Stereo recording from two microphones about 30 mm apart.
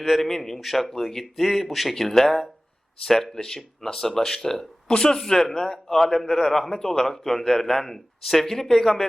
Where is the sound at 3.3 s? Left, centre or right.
Centre.